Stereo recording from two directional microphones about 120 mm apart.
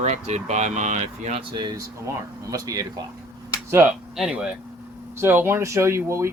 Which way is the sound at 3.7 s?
20° right (ahead or behind).